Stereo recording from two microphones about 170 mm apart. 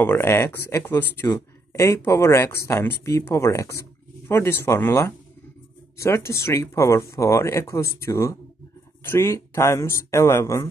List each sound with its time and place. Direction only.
0.0 s speech: 15° left (ahead or behind)